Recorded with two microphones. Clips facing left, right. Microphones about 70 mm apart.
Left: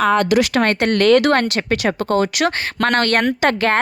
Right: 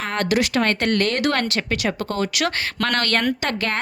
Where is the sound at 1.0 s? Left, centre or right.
Left.